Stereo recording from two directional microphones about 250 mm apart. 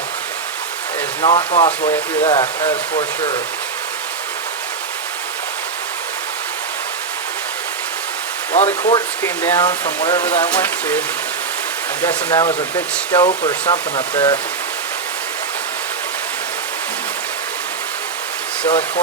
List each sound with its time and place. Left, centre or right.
1.2 s speech: left
8.5 s speech: left
10.5 s speech: centre
12.0 s speech: centre
18.7 s speech: centre